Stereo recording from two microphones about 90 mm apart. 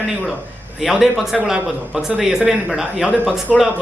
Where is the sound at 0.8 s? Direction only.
5° right (ahead or behind).